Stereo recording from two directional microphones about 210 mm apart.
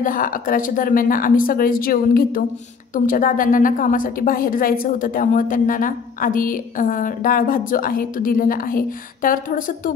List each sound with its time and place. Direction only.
0.0 s a woman's voice: 40° left (ahead or behind)